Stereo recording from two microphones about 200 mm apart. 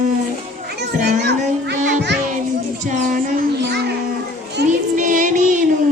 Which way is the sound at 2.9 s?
40° right (ahead or behind).